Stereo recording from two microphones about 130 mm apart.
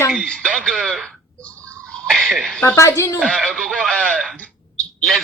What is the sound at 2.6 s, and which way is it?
Speech, 20° left (ahead or behind).